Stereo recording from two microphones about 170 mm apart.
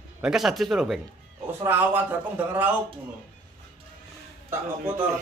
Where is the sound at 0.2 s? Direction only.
5° right (ahead or behind).